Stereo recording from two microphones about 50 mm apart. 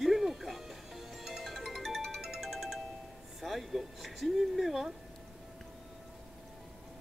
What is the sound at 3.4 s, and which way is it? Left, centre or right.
A woman's voice, centre.